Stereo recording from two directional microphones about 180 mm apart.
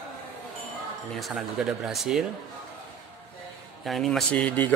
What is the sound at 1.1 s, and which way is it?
A man's voice, centre (ahead or behind).